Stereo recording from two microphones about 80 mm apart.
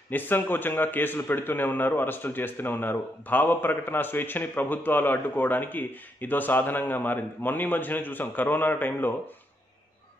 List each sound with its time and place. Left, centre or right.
0.1 s a man's voice: left